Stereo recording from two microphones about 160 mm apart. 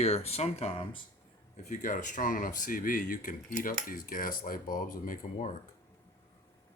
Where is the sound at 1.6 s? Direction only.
50° left (ahead or behind).